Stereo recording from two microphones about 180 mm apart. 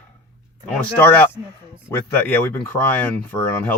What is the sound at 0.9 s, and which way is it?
Speech, 10° left (ahead or behind).